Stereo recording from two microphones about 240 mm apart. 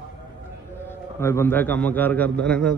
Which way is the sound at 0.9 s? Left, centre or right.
Centre.